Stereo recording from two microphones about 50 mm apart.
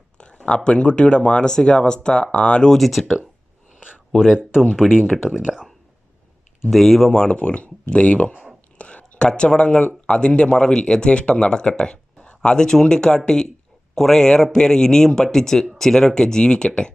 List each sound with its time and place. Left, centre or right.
0.2 s speech: left
2.7 s speech: centre
3.8 s a sound: right
4.4 s speech: centre
5.0 s speech: centre
6.7 s speech: centre
7.2 s speech: left
12.1 s a sound: left
12.4 s speech: centre